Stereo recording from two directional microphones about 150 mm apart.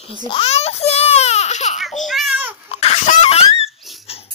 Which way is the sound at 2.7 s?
45° left (ahead or behind).